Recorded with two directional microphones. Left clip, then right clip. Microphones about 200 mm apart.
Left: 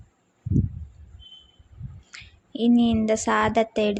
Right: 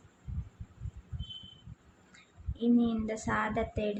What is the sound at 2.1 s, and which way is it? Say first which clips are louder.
Speech: left 18 dB; 40° left (ahead or behind).